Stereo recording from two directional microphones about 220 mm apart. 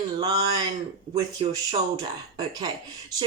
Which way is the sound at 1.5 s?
15° right (ahead or behind).